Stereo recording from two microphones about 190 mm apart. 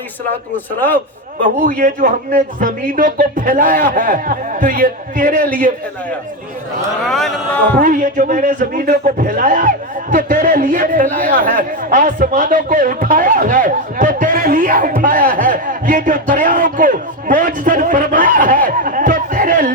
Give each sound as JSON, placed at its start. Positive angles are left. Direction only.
{"t": 0.5, "sound": "a man's voice", "side_deg": 10}
{"t": 1.4, "sound": "a man's voice", "side_deg": -45}
{"t": 7.0, "sound": "a man's voice", "side_deg": 0}
{"t": 7.8, "sound": "a man's voice", "side_deg": -45}